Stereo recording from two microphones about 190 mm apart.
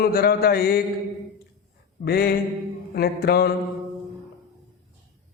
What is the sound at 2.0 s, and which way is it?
Mantra, 55° left (ahead or behind).